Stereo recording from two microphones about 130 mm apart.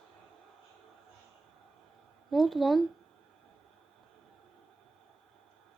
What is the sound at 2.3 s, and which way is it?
Speech, centre (ahead or behind).